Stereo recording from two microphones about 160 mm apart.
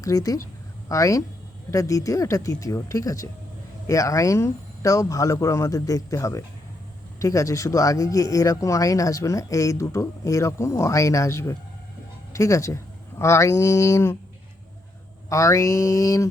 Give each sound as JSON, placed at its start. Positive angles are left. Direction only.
{"t": 0.0, "sound": "a man's voice", "side_deg": 20}
{"t": 15.3, "sound": "a man's voice", "side_deg": 20}